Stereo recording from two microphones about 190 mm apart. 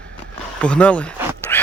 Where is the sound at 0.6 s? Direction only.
5° left (ahead or behind).